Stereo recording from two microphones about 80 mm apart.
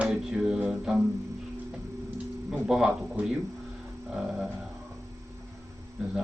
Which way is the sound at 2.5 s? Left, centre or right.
Centre.